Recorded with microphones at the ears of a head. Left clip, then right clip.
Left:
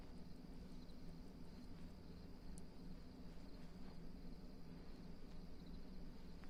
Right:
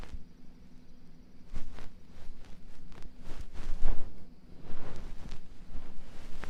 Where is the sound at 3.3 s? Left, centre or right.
Right.